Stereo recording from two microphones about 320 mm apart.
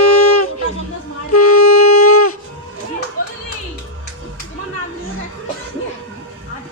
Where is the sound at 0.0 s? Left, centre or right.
Left.